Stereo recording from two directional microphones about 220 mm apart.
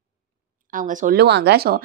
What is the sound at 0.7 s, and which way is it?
Speech, 35° right (ahead or behind).